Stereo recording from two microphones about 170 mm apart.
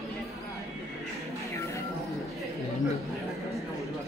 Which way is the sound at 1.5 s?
15° left (ahead or behind).